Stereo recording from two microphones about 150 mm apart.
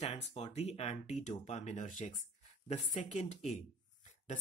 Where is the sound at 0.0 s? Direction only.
45° left (ahead or behind).